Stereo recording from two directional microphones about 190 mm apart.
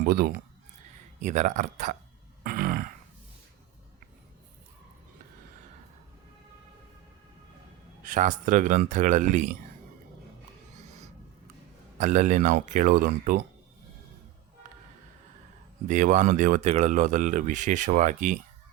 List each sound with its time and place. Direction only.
0.0 s speech: 55° right (ahead or behind)
1.2 s speech: 40° right (ahead or behind)
2.4 s a sound: 50° right (ahead or behind)
8.0 s speech: 40° right (ahead or behind)
10.8 s a sound: 35° right (ahead or behind)
11.9 s speech: 40° right (ahead or behind)
15.9 s speech: 40° right (ahead or behind)